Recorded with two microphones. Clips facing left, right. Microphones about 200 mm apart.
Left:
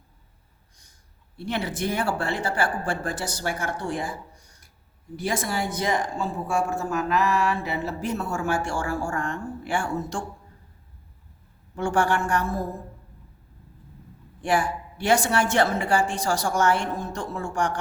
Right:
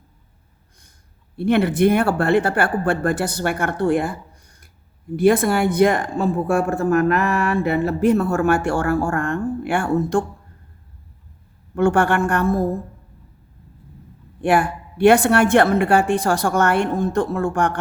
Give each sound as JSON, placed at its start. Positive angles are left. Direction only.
{"t": 1.4, "sound": "speech", "side_deg": -60}
{"t": 11.7, "sound": "speech", "side_deg": -60}
{"t": 14.4, "sound": "speech", "side_deg": -60}